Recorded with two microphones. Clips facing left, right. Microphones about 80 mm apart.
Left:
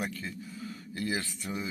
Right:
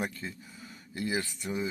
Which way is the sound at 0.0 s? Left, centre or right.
Right.